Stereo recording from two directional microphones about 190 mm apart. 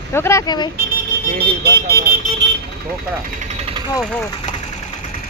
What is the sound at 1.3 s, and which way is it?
Speech, 55° right (ahead or behind).